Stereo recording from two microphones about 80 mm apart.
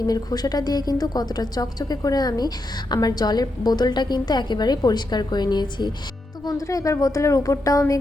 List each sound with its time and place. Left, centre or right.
0.0 s a woman's voice: left
6.4 s a woman's voice: left